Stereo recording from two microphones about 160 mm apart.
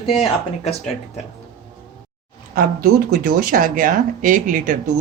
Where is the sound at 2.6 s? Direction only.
65° right (ahead or behind).